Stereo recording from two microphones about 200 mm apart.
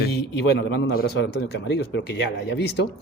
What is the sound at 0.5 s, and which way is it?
Speech, 60° left (ahead or behind).